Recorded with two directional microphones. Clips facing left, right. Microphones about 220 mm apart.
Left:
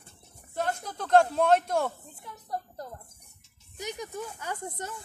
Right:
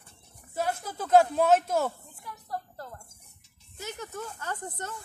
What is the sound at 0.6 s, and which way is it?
Speech, 5° right (ahead or behind).